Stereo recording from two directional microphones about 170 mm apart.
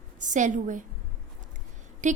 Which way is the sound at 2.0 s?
45° right (ahead or behind).